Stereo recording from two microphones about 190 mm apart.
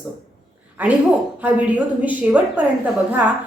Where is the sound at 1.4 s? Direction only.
10° right (ahead or behind).